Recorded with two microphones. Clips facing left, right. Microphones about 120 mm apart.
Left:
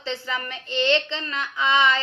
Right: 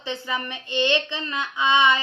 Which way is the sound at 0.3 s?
20° right (ahead or behind).